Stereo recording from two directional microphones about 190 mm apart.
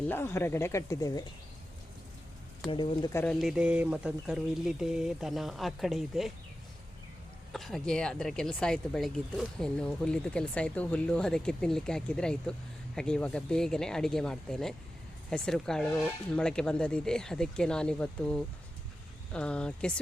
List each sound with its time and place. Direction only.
0.1 s speech: 15° left (ahead or behind)
2.6 s speech: 25° left (ahead or behind)
3.1 s speech: 10° left (ahead or behind)
3.3 s speech: centre (ahead or behind)
7.5 s speech: centre (ahead or behind)